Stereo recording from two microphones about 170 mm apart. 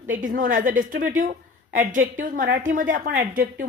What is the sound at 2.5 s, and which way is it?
A woman's voice, 55° right (ahead or behind).